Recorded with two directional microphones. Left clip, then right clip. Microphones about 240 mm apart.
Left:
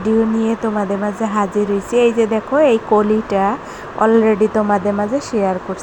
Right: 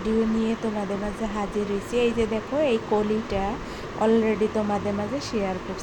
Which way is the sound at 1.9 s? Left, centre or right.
Left.